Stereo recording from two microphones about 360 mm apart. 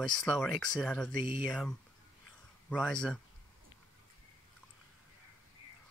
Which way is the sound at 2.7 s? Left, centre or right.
Centre.